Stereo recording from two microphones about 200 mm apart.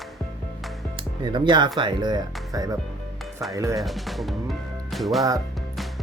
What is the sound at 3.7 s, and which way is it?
Speech, centre (ahead or behind).